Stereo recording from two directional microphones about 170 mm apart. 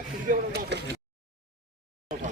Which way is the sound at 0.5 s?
70° right (ahead or behind).